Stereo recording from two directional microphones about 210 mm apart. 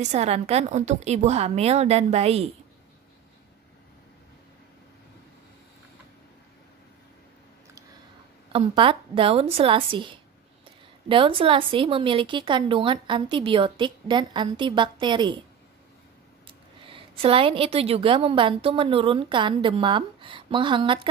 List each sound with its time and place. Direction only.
0.0 s a woman's voice: 30° right (ahead or behind)
8.5 s a woman's voice: 25° right (ahead or behind)
16.4 s a woman's voice: 25° right (ahead or behind)